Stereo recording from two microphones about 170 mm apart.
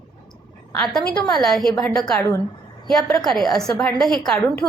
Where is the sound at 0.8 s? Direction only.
5° left (ahead or behind).